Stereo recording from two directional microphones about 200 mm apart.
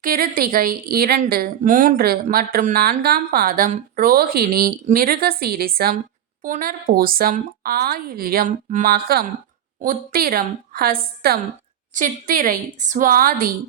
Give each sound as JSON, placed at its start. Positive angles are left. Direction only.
{"t": 0.0, "sound": "a woman's voice", "side_deg": -45}